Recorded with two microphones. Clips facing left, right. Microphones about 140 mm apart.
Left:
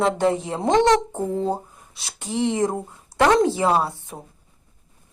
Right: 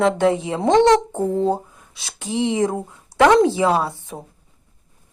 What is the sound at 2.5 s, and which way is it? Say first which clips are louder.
Speech: right 2 dB; 90° right.